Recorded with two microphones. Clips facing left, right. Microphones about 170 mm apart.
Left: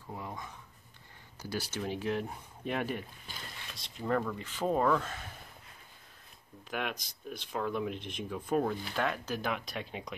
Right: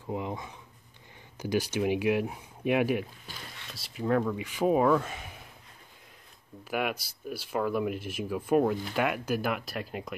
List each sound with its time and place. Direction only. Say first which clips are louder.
0.1 s speech: right 8 dB; 20° right (ahead or behind)
6.7 s speech: right 6 dB; 5° right (ahead or behind)